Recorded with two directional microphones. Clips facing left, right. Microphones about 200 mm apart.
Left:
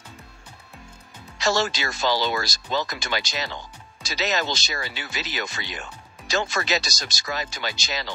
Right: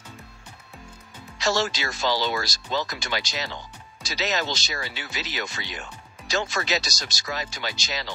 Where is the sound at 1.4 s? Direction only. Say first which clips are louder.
Left 1 dB; 50° left (ahead or behind).